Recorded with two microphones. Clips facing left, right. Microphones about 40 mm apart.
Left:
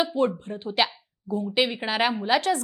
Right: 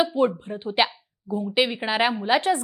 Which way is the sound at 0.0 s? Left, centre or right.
Centre.